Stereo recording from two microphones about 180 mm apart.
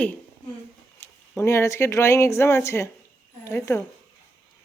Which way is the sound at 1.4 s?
15° left (ahead or behind).